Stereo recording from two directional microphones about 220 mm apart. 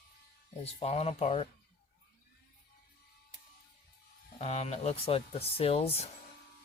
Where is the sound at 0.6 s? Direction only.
30° left (ahead or behind).